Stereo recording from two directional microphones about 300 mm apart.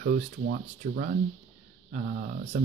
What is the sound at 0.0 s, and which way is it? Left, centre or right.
Speech, right.